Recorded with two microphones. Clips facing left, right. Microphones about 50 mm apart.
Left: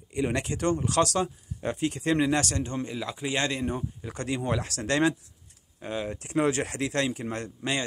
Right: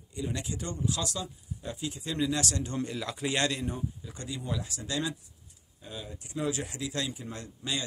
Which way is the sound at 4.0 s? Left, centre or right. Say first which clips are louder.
Left 8 dB; left.